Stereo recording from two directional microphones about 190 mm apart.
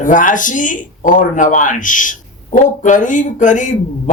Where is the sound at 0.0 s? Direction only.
45° left (ahead or behind).